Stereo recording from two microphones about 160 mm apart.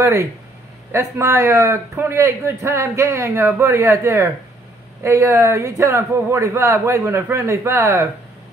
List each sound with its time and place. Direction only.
0.0 s a man's voice: 15° right (ahead or behind)